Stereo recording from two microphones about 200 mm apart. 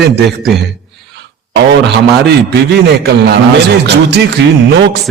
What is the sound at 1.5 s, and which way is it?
A man's voice, 60° right (ahead or behind).